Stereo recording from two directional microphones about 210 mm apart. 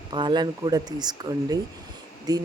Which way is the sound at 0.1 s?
20° right (ahead or behind).